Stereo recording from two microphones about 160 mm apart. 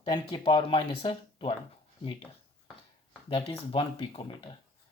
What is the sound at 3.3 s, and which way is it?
Speech, 35° left (ahead or behind).